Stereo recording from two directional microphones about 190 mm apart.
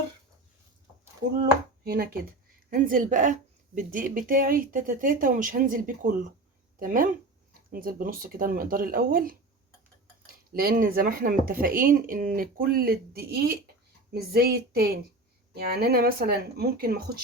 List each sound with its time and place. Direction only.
1.8 s speech: 55° right (ahead or behind)